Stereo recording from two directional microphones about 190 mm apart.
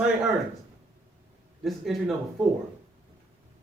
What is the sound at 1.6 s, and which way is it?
Speech, centre (ahead or behind).